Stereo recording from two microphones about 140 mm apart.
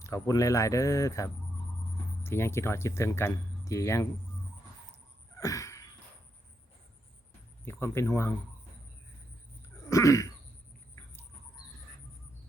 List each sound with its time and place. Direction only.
0.0 s speech: 25° left (ahead or behind)
5.4 s a sound: 20° left (ahead or behind)
7.6 s speech: 15° left (ahead or behind)
9.9 s speech: 20° left (ahead or behind)